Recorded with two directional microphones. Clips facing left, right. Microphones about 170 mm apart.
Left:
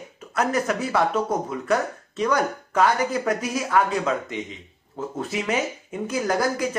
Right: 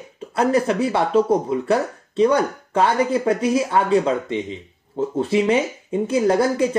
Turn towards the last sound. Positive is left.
turn(degrees=-30)  # may be behind; listen again after turning